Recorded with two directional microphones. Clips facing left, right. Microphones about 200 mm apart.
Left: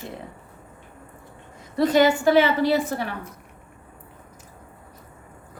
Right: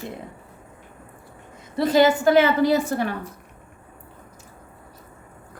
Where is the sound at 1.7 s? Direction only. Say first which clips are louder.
Right 1 dB; 30° right (ahead or behind).